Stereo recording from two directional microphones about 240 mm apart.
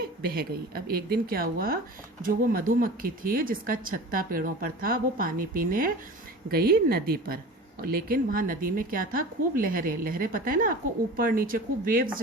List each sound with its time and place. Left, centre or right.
0.0 s speech: right